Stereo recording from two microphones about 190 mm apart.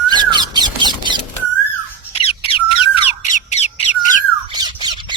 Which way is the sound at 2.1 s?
30° left (ahead or behind).